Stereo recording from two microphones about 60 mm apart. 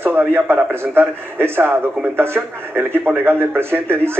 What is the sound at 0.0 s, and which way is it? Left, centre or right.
Speech, right.